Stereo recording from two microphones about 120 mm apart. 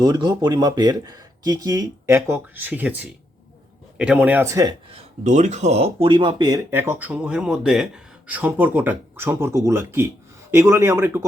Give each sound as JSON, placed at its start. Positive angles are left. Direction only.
{"t": 0.0, "sound": "speech", "side_deg": -35}
{"t": 5.2, "sound": "speech", "side_deg": -80}
{"t": 6.7, "sound": "speech", "side_deg": -20}